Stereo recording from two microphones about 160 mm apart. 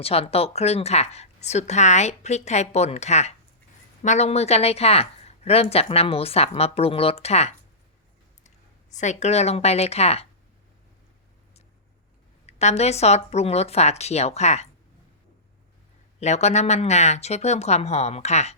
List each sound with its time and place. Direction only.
0.0 s speech: 40° left (ahead or behind)
9.0 s speech: 45° left (ahead or behind)
12.5 s speech: 45° left (ahead or behind)
16.2 s speech: 45° left (ahead or behind)